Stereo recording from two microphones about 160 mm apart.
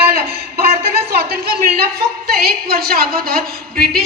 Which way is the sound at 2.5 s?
80° right.